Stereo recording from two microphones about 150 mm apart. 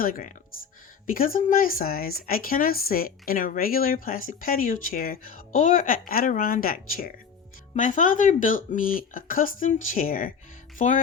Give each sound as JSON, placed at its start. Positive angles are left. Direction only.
{"t": 0.0, "sound": "speech", "side_deg": 65}
{"t": 7.8, "sound": "speech", "side_deg": 55}
{"t": 10.8, "sound": "speech", "side_deg": 60}